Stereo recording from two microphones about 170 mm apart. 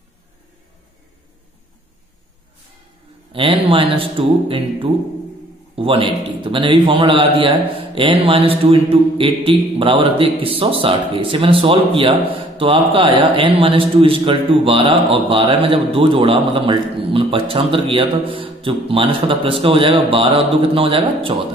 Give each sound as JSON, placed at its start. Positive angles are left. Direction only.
{"t": 3.3, "sound": "a man's voice", "side_deg": -30}